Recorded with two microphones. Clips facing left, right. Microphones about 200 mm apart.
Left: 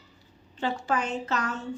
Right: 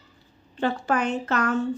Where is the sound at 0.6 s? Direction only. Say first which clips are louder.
Right 4 dB; 60° right (ahead or behind).